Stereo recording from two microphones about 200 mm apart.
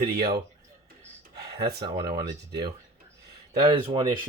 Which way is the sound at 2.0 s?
50° right (ahead or behind).